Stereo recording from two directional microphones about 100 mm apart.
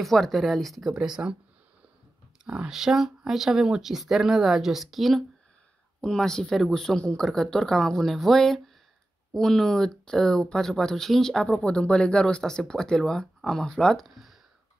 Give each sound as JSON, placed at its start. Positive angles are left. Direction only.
{"t": 0.0, "sound": "speech", "side_deg": 0}
{"t": 2.4, "sound": "speech", "side_deg": -10}